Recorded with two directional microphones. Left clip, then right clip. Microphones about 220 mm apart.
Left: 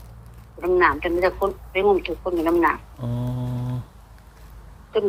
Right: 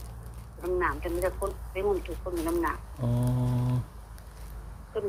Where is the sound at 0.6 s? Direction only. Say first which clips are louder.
Left 11 dB; 45° left (ahead or behind).